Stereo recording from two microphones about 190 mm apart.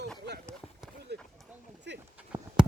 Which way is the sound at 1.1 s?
60° right (ahead or behind).